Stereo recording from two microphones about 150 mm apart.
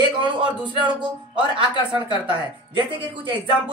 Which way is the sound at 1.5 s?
35° right (ahead or behind).